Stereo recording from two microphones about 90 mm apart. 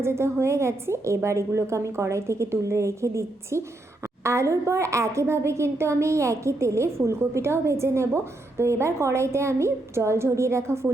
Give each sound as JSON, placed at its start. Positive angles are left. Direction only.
{"t": 0.0, "sound": "a woman's voice", "side_deg": -30}